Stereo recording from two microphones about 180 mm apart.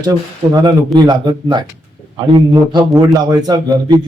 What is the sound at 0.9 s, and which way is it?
Speech, 25° right (ahead or behind).